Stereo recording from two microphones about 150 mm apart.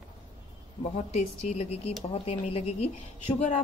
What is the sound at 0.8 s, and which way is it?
A woman's voice, 45° left (ahead or behind).